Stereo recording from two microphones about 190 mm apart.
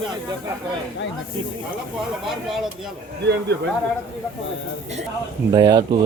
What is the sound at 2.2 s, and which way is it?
Speech, centre (ahead or behind).